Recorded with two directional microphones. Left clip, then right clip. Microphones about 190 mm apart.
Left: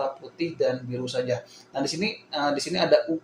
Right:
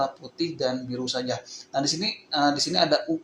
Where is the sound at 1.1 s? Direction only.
20° right (ahead or behind).